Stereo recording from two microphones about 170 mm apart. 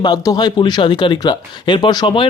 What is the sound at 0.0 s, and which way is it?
Speech, 25° left (ahead or behind).